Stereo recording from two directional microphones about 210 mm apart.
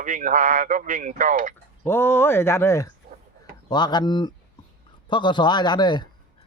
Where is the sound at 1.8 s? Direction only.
10° left (ahead or behind).